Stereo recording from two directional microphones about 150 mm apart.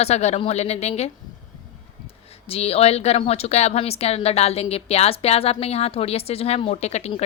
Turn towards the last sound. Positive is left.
turn(degrees=45)  # may be behind; listen again after turning